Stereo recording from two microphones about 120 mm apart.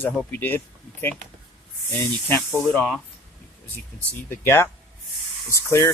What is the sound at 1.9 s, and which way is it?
Speech, 20° left (ahead or behind).